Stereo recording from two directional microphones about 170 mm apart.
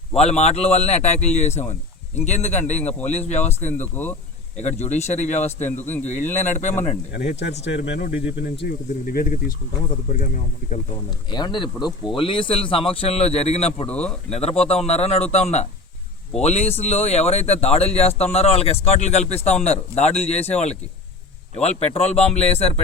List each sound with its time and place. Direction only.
0.1 s speech: 40° left (ahead or behind)
3.7 s speech: 10° left (ahead or behind)
4.5 s speech: 45° left (ahead or behind)
7.1 s speech: 85° left
9.0 s speech: 60° left (ahead or behind)
11.3 s a man's voice: 25° left (ahead or behind)
13.8 s speech: 5° left (ahead or behind)
14.3 s speech: 40° left (ahead or behind)